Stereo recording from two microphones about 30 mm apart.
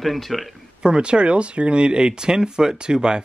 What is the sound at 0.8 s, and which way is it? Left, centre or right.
Speech, right.